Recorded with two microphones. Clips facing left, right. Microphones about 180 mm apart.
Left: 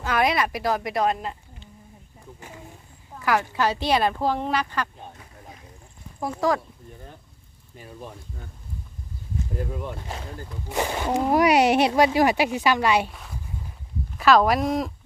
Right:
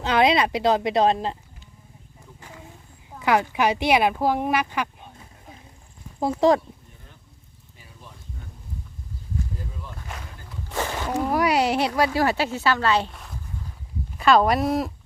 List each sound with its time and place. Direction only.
0.0 s speech: 25° right (ahead or behind)
3.2 s speech: 20° right (ahead or behind)
6.1 s speech: 25° right (ahead or behind)
9.6 s speech: 65° left (ahead or behind)
10.0 s speech: 30° left (ahead or behind)
10.7 s speech: 15° left (ahead or behind)
13.1 s speech: centre (ahead or behind)